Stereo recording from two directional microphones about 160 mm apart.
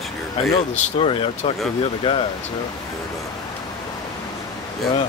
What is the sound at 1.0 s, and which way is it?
Speech, 35° left (ahead or behind).